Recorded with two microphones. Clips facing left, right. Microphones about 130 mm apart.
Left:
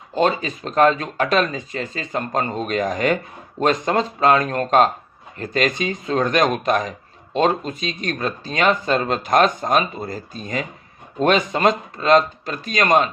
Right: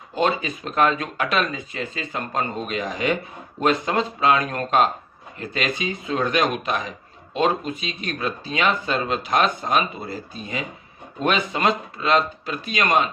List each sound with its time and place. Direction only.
0.2 s speech: 35° left (ahead or behind)